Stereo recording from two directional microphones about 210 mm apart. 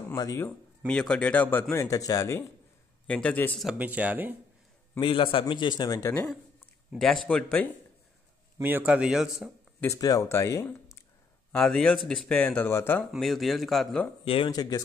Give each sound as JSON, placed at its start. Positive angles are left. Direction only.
{"t": 0.1, "sound": "speech", "side_deg": 15}
{"t": 0.8, "sound": "speech", "side_deg": 5}
{"t": 5.0, "sound": "a man's voice", "side_deg": 25}
{"t": 6.9, "sound": "speech", "side_deg": 0}
{"t": 8.5, "sound": "speech", "side_deg": -10}
{"t": 9.8, "sound": "speech", "side_deg": 15}
{"t": 14.2, "sound": "a man's voice", "side_deg": 25}